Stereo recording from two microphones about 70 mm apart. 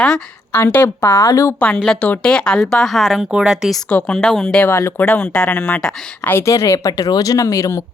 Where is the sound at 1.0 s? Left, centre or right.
Left.